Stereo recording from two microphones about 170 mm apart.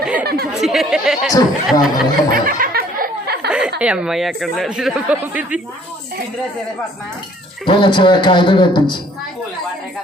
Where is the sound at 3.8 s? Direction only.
5° right (ahead or behind).